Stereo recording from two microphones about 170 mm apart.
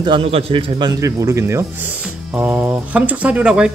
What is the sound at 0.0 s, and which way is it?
A man's voice, 30° right (ahead or behind).